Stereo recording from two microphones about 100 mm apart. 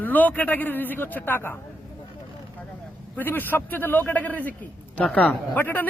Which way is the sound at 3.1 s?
20° left (ahead or behind).